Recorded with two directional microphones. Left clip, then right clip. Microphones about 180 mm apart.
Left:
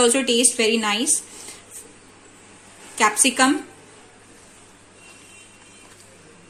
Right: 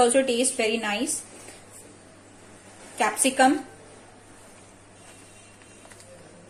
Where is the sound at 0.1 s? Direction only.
50° left (ahead or behind).